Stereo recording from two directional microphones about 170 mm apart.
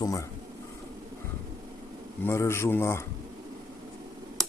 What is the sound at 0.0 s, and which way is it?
Speech, 20° left (ahead or behind).